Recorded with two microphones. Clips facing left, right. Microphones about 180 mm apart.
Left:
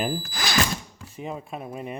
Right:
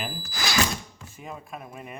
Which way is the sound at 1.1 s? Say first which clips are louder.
Left 6 dB; 25° left (ahead or behind).